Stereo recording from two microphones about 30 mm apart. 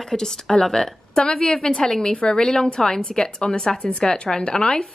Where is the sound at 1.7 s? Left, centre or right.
Centre.